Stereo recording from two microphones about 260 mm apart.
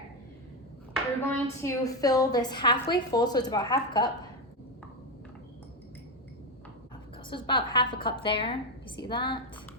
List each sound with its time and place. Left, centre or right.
1.3 s a woman's voice: centre
7.3 s a woman's voice: centre